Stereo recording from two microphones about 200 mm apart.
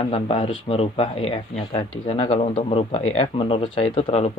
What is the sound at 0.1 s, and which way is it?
Speech, 25° left (ahead or behind).